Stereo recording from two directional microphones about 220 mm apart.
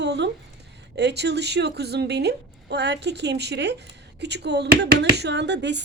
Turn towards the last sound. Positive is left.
turn(degrees=-50)  # may be behind; listen again after turning